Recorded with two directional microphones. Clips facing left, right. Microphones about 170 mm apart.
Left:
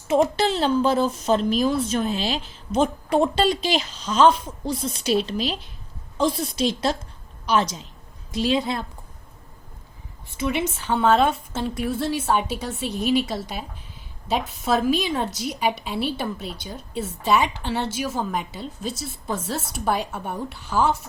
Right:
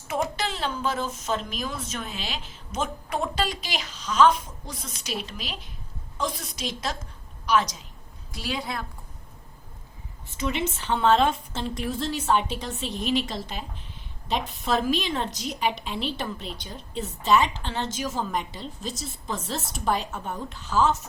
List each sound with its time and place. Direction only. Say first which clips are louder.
0.1 s a woman's voice: left 9 dB; 30° left (ahead or behind)
10.3 s a woman's voice: left 3 dB; 10° left (ahead or behind)